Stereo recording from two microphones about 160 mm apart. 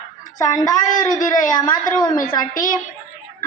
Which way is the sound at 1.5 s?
25° left (ahead or behind).